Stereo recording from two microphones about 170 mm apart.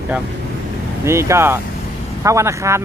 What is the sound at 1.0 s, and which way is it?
Speech, 15° right (ahead or behind).